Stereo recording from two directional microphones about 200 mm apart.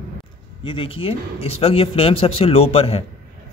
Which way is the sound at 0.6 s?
25° left (ahead or behind).